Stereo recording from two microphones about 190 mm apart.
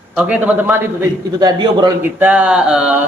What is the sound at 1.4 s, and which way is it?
Speech, 20° right (ahead or behind).